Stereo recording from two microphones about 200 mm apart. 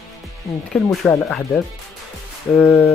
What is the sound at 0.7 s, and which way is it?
Speech, centre (ahead or behind).